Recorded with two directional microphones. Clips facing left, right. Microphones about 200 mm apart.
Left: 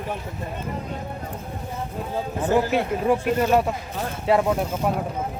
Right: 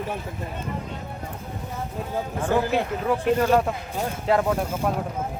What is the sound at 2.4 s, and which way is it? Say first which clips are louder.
Speech: left 2 dB; 15° left (ahead or behind).